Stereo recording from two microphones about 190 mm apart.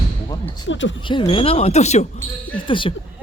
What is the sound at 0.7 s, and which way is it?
Speech, 75° left (ahead or behind).